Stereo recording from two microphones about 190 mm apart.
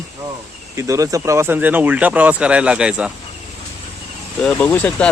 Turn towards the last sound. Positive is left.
turn(degrees=10)  # may be behind; listen again after turning